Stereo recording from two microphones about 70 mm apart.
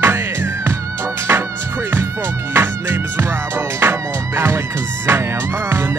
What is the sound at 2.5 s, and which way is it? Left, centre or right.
Music, right.